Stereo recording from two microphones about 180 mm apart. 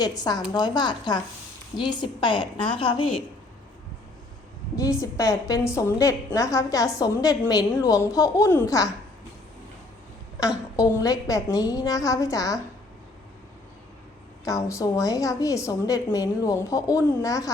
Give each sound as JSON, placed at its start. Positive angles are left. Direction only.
{"t": 0.0, "sound": "a woman's voice", "side_deg": 20}
{"t": 4.9, "sound": "a woman's voice", "side_deg": 20}
{"t": 10.4, "sound": "a woman's voice", "side_deg": 20}
{"t": 14.4, "sound": "a woman's voice", "side_deg": 15}